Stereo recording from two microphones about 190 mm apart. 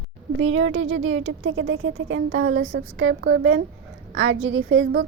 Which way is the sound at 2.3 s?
50° right (ahead or behind).